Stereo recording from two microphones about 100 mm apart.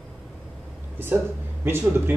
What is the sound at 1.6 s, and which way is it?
Speech, 20° right (ahead or behind).